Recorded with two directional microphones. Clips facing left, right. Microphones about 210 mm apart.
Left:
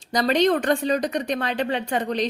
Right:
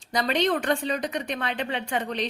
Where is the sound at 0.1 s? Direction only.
40° left (ahead or behind).